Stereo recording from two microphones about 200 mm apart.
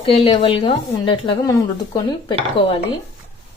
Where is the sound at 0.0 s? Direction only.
30° left (ahead or behind).